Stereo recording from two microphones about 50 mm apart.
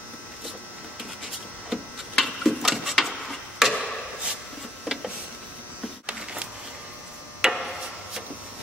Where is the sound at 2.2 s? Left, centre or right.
Centre.